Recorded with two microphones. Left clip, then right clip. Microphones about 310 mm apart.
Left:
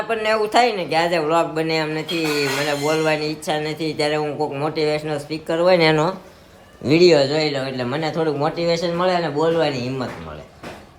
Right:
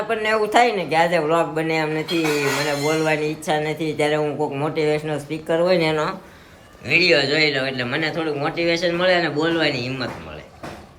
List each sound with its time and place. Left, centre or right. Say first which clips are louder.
0.1 s speech: even; centre
5.6 s speech: left 6 dB; left
6.8 s a man's voice: left 2 dB; centre